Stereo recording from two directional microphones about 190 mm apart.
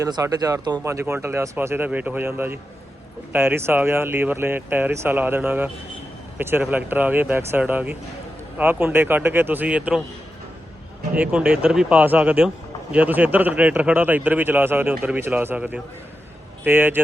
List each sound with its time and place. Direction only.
0.0 s a man's voice: 20° right (ahead or behind)
11.1 s a man's voice: 5° right (ahead or behind)